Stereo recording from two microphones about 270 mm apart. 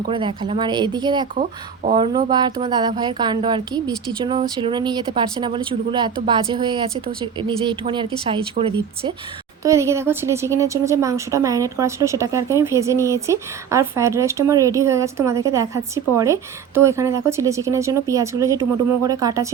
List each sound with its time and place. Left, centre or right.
0.1 s a woman's voice: centre